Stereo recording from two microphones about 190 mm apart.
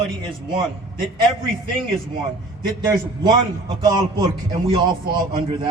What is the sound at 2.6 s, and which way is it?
A man's voice, 20° right (ahead or behind).